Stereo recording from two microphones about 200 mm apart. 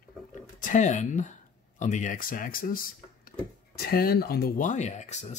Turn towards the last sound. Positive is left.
turn(degrees=35)  # may be behind; listen again after turning